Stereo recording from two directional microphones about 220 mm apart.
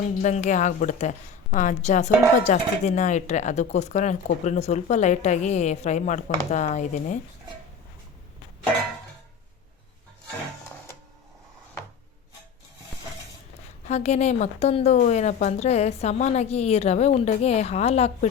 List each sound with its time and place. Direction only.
0.2 s speech: 35° left (ahead or behind)
13.8 s a woman's voice: 30° left (ahead or behind)